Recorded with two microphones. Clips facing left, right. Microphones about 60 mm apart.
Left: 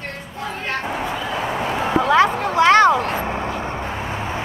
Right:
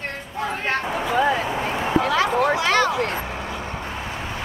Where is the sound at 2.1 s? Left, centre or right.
Left.